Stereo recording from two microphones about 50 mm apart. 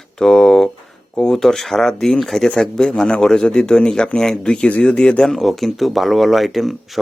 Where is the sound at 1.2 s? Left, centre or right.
Centre.